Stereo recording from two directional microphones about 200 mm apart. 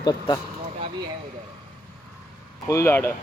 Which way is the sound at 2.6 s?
15° left (ahead or behind).